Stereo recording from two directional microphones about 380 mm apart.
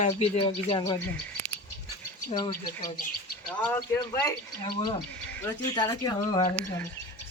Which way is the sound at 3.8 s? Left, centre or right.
Centre.